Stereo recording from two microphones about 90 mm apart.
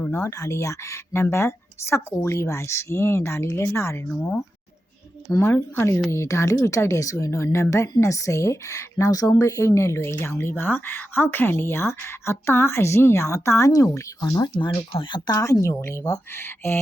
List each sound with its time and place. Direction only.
0.1 s speech: 35° left (ahead or behind)
4.1 s speech: 5° left (ahead or behind)
5.4 s speech: 25° left (ahead or behind); by 15.2 s 65° left (ahead or behind)
15.3 s speech: 35° left (ahead or behind)